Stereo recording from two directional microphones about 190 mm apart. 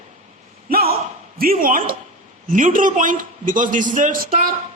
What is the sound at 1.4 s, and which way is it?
A man's voice, 50° right (ahead or behind).